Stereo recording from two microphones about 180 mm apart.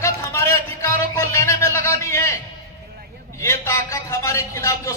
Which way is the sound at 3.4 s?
15° left (ahead or behind).